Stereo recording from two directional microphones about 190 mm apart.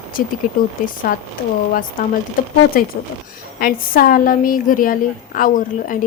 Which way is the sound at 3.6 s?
50° left (ahead or behind).